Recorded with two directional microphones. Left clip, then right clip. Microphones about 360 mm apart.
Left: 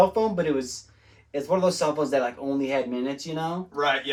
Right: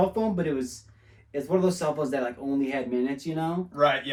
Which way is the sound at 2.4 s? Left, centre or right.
Centre.